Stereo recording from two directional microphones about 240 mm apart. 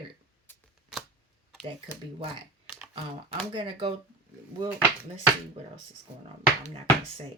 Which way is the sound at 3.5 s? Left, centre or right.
Right.